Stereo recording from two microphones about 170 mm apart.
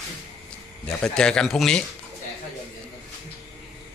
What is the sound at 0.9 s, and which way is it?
Speech, 5° left (ahead or behind).